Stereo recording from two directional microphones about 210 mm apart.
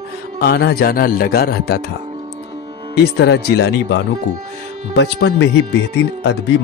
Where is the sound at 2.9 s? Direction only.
50° left (ahead or behind).